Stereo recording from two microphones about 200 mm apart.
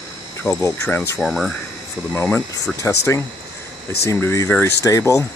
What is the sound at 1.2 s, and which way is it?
Speech, centre (ahead or behind).